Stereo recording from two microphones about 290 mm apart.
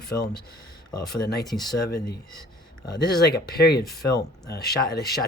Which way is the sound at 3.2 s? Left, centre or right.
Left.